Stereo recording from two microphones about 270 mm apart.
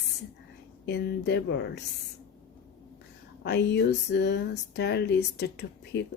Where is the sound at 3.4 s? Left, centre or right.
Left.